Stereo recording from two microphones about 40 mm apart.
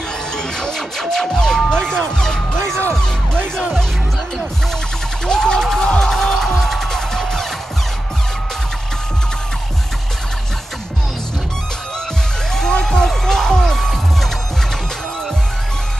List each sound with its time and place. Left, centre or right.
0.3 s music: centre
1.7 s speech: centre
5.2 s music: centre
12.8 s music: centre